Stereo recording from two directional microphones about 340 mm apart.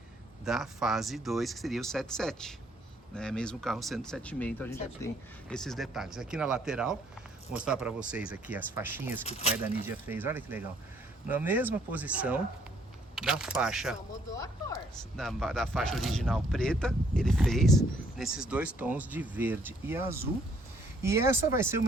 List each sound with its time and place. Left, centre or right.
0.4 s speech: centre
9.2 s speech: centre
9.8 s speech: centre
15.1 s speech: centre